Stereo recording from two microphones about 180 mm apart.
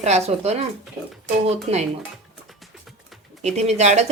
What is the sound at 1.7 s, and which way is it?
Speech, 35° right (ahead or behind).